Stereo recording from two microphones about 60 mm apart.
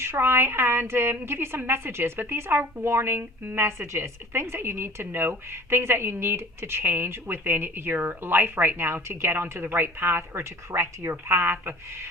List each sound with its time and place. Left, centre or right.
0.0 s a woman's voice: right